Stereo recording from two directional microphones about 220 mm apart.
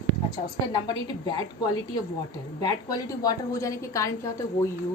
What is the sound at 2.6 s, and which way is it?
A woman's voice, 15° left (ahead or behind).